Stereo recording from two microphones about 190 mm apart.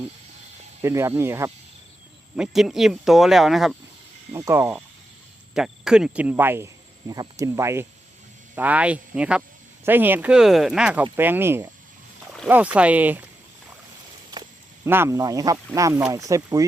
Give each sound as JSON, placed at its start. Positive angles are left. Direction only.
{"t": 0.8, "sound": "speech", "side_deg": -15}
{"t": 2.3, "sound": "speech", "side_deg": 0}
{"t": 4.4, "sound": "speech", "side_deg": -10}
{"t": 14.8, "sound": "speech", "side_deg": -10}